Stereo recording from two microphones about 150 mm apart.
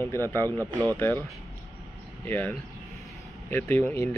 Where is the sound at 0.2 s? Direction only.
20° right (ahead or behind).